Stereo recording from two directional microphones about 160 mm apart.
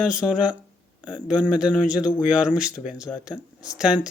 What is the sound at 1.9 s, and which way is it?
Speech, 5° right (ahead or behind).